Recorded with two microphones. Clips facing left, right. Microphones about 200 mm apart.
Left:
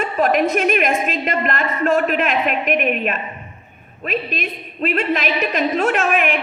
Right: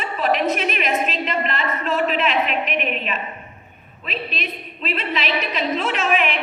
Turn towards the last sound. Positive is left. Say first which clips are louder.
# left 3 dB
turn(degrees=50)  # may be behind; listen again after turning